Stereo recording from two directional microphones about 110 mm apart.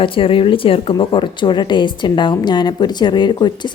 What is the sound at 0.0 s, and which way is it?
A woman's voice, 55° left (ahead or behind).